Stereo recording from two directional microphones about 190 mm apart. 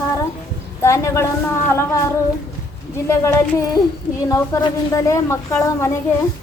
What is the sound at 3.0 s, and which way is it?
A woman's voice, 15° left (ahead or behind).